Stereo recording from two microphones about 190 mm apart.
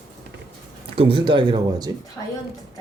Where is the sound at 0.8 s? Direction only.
30° right (ahead or behind).